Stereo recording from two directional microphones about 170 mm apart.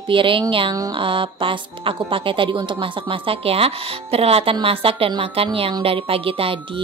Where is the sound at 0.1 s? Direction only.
30° right (ahead or behind).